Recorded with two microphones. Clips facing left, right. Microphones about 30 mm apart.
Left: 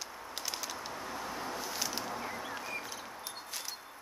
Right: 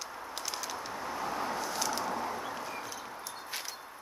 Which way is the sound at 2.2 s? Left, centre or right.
Centre.